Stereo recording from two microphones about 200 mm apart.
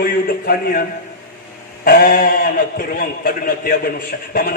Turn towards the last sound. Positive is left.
turn(degrees=50)  # may be behind; listen again after turning